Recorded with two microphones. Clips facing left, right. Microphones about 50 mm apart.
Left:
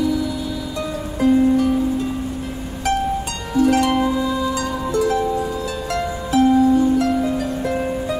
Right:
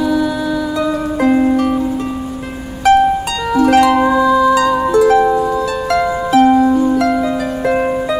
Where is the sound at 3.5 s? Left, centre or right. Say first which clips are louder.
Right 6 dB; right.